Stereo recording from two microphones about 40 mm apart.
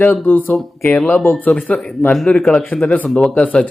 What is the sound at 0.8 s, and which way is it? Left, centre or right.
Speech, left.